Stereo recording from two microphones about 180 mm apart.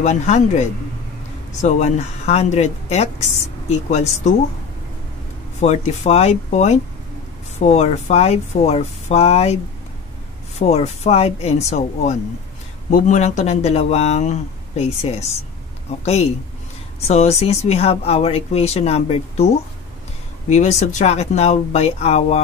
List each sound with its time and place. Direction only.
0.0 s speech: 40° left (ahead or behind)
5.6 s speech: 40° left (ahead or behind)
10.6 s speech: 35° left (ahead or behind)